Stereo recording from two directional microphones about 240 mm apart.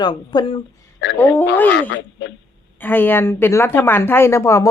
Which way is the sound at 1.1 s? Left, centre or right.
Centre.